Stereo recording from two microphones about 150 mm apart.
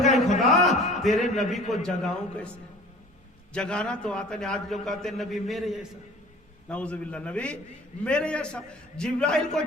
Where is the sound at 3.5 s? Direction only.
5° left (ahead or behind).